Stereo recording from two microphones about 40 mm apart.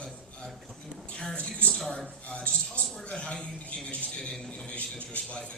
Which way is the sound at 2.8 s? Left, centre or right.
Left.